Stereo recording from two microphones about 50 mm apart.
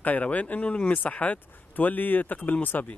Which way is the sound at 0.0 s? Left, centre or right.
Left.